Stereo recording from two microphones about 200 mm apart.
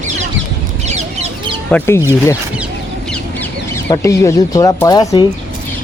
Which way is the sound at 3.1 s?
10° left (ahead or behind).